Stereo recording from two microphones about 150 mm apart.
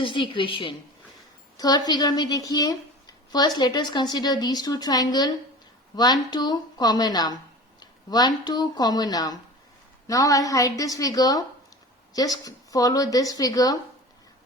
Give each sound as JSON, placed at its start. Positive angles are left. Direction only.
{"t": 0.0, "sound": "a woman's voice", "side_deg": 35}